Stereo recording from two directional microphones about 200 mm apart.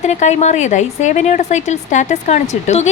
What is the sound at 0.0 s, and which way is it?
A woman's voice, 35° left (ahead or behind).